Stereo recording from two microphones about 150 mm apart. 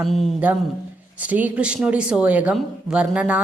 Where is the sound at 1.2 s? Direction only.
10° right (ahead or behind).